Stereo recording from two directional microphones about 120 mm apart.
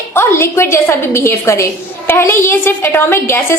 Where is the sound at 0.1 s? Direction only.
20° left (ahead or behind).